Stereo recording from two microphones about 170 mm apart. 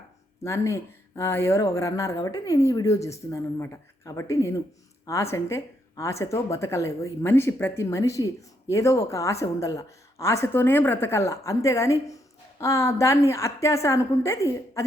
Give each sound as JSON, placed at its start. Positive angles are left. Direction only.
{"t": 0.4, "sound": "a woman's voice", "side_deg": 15}